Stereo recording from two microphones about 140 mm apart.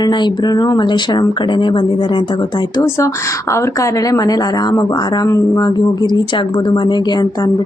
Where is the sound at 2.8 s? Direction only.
20° left (ahead or behind).